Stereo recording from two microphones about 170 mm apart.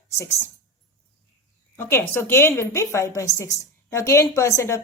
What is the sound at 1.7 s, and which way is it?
A woman's voice, 15° left (ahead or behind).